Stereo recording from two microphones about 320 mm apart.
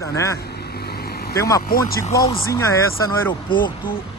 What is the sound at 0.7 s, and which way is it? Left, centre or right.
Vehicle, left.